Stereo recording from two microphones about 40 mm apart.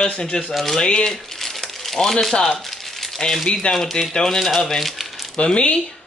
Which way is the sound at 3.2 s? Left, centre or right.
Centre.